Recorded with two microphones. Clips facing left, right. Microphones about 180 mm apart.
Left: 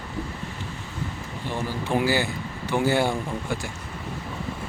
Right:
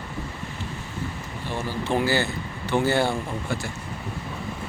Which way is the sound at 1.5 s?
10° left (ahead or behind).